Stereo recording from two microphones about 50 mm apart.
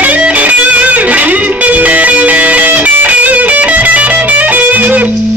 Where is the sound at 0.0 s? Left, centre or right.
Right.